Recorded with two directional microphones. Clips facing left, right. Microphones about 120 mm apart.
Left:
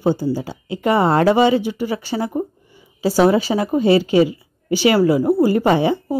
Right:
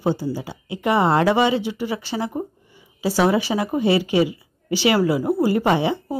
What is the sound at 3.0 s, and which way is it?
Speech, 30° left (ahead or behind).